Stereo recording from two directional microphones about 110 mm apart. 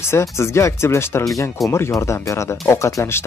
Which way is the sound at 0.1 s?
25° left (ahead or behind).